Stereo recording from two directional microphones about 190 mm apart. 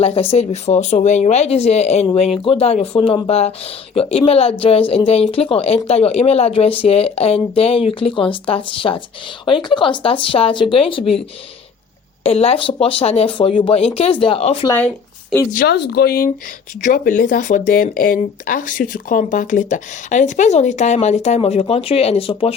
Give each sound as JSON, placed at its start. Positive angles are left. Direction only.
{"t": 0.0, "sound": "speech", "side_deg": 30}
{"t": 12.2, "sound": "speech", "side_deg": 30}
{"t": 14.7, "sound": "a woman's voice", "side_deg": 10}
{"t": 15.5, "sound": "speech", "side_deg": 60}